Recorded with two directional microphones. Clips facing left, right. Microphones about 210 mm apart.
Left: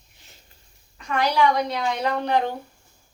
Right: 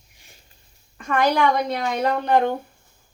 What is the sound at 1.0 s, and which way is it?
Speech, 50° right (ahead or behind).